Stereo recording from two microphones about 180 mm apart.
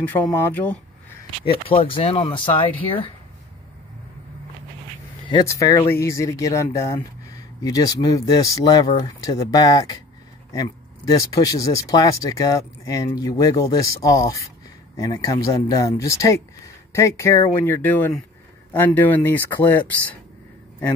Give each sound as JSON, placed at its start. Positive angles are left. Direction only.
{"t": 0.0, "sound": "speech", "side_deg": 10}
{"t": 1.4, "sound": "speech", "side_deg": 30}
{"t": 5.3, "sound": "speech", "side_deg": 20}